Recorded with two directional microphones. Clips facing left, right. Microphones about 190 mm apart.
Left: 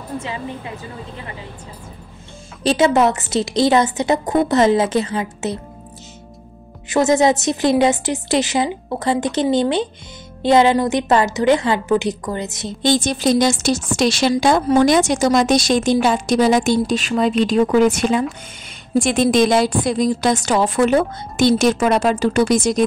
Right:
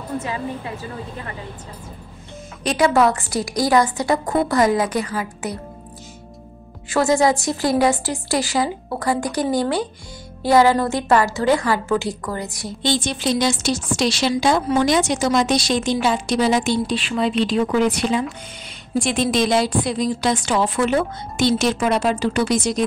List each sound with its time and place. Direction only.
2.6 s a woman's voice: 25° left (ahead or behind)
6.9 s a woman's voice: 20° left (ahead or behind)
12.8 s a woman's voice: 45° left (ahead or behind)